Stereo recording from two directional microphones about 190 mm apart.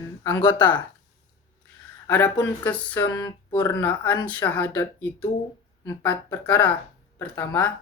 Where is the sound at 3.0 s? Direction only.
20° left (ahead or behind).